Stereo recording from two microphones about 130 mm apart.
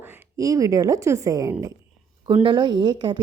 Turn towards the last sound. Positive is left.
turn(degrees=-35)  # may be behind; listen again after turning